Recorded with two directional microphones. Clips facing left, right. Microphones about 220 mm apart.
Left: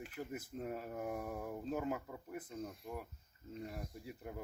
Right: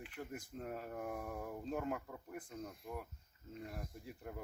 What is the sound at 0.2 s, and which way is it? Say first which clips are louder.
Speech: left 3 dB; centre (ahead or behind).